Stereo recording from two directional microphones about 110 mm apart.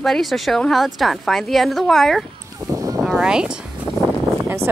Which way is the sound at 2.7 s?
30° right (ahead or behind).